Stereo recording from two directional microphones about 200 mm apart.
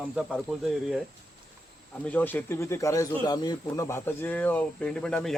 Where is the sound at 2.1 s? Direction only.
10° left (ahead or behind).